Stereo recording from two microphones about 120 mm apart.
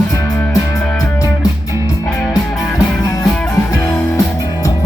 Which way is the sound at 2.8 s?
30° left (ahead or behind).